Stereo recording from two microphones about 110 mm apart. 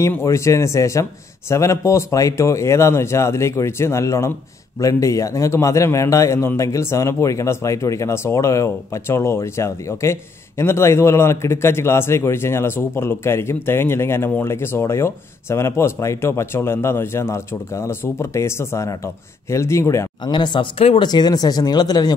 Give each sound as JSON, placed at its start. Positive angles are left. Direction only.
{"t": 0.0, "sound": "a man's voice", "side_deg": 25}
{"t": 20.2, "sound": "speech", "side_deg": 45}